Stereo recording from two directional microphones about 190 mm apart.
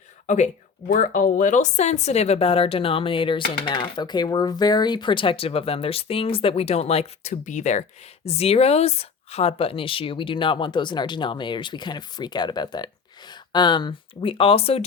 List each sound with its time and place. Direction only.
0.3 s speech: 40° left (ahead or behind)